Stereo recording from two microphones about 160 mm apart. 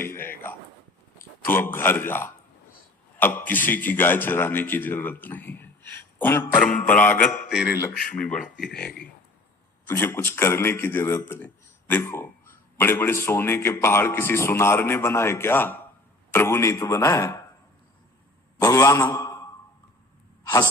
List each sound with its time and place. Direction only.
0.0 s a sound: 15° left (ahead or behind)
1.5 s a man's voice: 15° left (ahead or behind)
9.9 s a man's voice: 15° left (ahead or behind)
18.6 s a man's voice: 20° left (ahead or behind)
20.4 s sigh: 20° left (ahead or behind)